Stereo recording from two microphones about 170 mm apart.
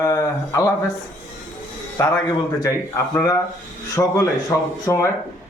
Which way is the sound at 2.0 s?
20° left (ahead or behind).